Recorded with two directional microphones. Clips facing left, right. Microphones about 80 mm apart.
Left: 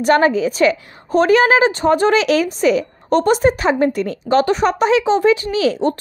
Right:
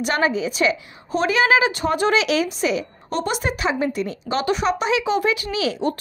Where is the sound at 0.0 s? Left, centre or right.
Left.